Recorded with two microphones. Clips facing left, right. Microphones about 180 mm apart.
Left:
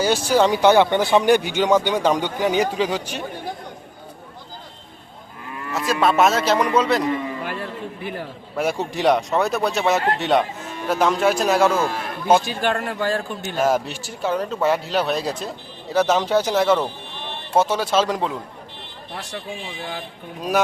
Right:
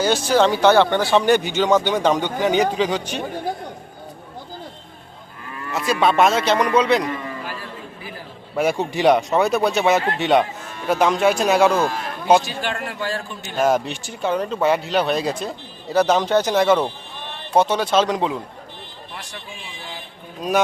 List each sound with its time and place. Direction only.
0.0 s speech: 10° left (ahead or behind)
5.7 s speech: centre (ahead or behind)
8.5 s speech: centre (ahead or behind)
12.6 s a man's voice: 50° left (ahead or behind)
13.6 s speech: 5° left (ahead or behind)